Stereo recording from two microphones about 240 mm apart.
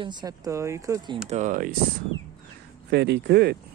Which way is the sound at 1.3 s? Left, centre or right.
Right.